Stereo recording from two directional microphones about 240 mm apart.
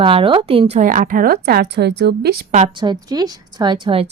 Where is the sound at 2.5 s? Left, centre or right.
Right.